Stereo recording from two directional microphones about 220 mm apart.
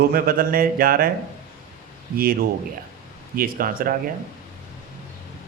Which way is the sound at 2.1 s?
40° right (ahead or behind).